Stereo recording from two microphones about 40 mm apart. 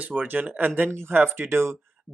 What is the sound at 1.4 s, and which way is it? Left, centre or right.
Speech, right.